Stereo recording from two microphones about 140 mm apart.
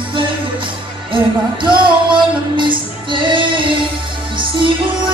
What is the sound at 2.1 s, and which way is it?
Music, 35° right (ahead or behind).